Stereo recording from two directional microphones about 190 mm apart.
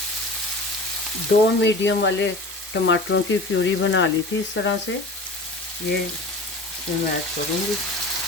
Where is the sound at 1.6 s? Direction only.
70° left (ahead or behind).